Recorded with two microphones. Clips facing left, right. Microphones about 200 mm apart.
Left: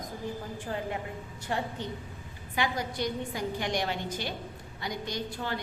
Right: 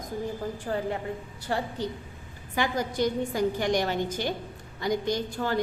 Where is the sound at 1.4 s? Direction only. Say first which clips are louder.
Right 3 dB; 35° right (ahead or behind).